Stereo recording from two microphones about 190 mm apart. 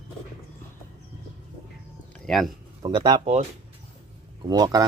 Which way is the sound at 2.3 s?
Centre (ahead or behind).